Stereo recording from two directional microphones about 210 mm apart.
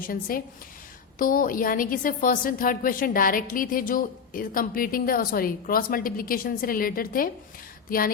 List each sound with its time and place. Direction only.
0.0 s a woman's voice: 45° left (ahead or behind)